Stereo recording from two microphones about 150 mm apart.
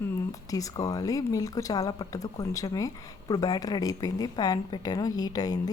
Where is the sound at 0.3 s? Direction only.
25° left (ahead or behind).